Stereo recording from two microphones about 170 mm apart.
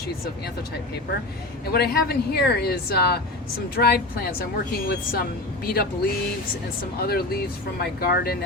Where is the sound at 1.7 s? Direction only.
70° left (ahead or behind).